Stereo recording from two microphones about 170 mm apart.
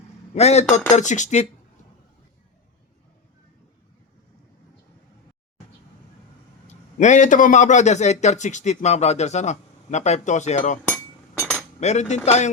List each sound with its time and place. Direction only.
0.3 s cutlery: 40° left (ahead or behind)
0.9 s a man's voice: 45° left (ahead or behind)
6.7 s a man's voice: 45° left (ahead or behind)
10.9 s chink: 5° left (ahead or behind)
11.8 s cutlery: 40° left (ahead or behind)